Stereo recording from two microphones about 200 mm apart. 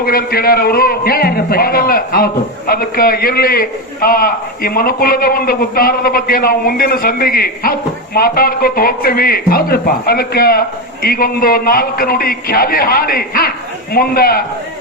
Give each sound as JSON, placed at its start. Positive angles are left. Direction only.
{"t": 0.0, "sound": "speech", "side_deg": 45}